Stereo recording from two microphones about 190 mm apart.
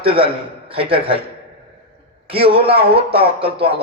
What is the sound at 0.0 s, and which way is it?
A man's voice, 30° right (ahead or behind).